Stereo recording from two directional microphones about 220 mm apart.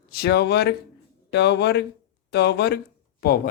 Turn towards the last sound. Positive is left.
turn(degrees=45)  # may be behind; listen again after turning